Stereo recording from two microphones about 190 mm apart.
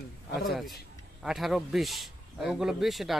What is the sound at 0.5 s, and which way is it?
Speech, centre (ahead or behind).